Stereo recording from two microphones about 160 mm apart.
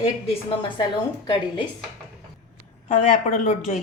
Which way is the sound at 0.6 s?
30° left (ahead or behind).